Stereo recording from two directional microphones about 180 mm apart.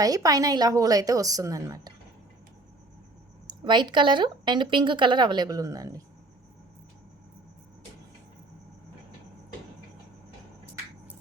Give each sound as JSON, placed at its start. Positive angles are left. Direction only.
{"t": 0.0, "sound": "speech", "side_deg": -20}
{"t": 3.4, "sound": "speech", "side_deg": -25}